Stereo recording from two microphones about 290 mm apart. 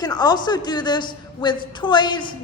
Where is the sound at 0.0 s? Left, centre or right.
Centre.